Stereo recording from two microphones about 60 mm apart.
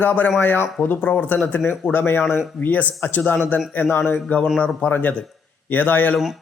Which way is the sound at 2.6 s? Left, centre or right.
Left.